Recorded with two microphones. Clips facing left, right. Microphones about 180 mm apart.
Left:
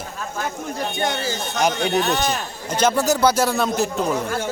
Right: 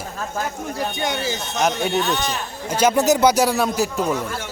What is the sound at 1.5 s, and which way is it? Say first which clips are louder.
Speech: even; 5° right (ahead or behind).